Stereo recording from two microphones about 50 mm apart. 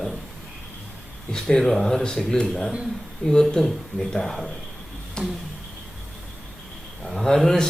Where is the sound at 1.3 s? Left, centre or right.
Centre.